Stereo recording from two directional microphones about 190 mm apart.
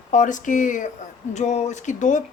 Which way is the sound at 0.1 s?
40° left (ahead or behind).